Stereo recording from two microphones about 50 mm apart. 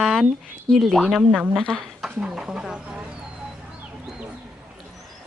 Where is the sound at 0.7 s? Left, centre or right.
Centre.